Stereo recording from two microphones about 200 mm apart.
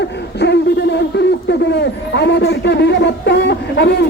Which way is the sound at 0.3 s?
60° left (ahead or behind).